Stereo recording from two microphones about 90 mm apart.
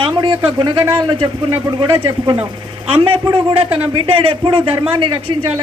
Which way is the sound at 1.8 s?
60° right (ahead or behind).